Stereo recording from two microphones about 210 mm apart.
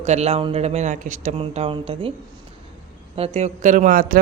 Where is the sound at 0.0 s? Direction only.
30° right (ahead or behind).